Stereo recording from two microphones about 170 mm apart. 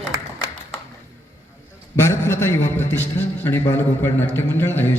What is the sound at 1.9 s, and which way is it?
A man's voice, 15° left (ahead or behind).